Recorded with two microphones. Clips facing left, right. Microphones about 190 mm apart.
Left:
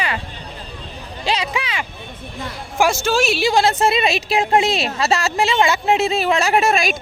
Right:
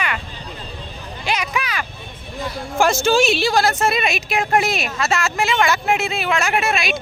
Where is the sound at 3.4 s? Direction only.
25° left (ahead or behind).